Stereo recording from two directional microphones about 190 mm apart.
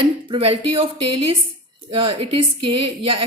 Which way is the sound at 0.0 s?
30° right (ahead or behind).